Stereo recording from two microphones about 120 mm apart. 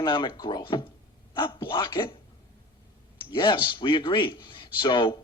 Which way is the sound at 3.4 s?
45° left (ahead or behind).